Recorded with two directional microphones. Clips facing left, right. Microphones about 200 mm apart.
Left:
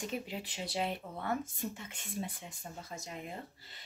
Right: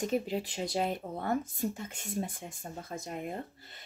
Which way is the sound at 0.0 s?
40° right (ahead or behind).